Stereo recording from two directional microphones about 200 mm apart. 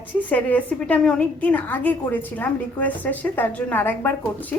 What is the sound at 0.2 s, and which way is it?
A woman's voice, 10° left (ahead or behind).